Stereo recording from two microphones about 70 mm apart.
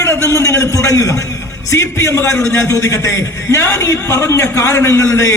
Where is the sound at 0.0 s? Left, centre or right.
Left.